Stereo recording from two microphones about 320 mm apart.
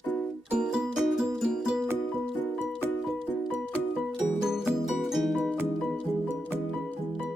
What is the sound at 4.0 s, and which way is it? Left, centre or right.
Music, centre.